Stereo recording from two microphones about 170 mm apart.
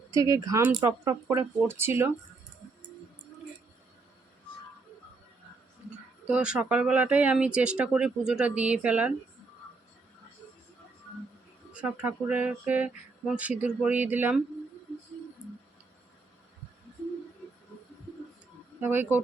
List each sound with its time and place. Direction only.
0.1 s speech: 20° right (ahead or behind)
6.2 s speech: 5° right (ahead or behind)
11.7 s speech: 5° right (ahead or behind)
18.8 s speech: 10° right (ahead or behind)